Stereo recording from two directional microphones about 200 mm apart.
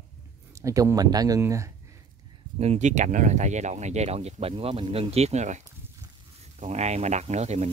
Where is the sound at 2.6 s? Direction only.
35° right (ahead or behind).